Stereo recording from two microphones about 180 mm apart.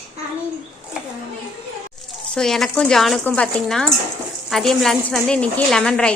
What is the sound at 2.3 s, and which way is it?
Speech, centre (ahead or behind).